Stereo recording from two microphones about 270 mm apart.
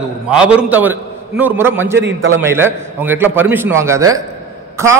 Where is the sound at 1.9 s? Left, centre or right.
Right.